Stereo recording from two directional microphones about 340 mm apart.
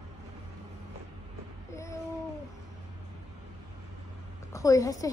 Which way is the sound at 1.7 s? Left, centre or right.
Centre.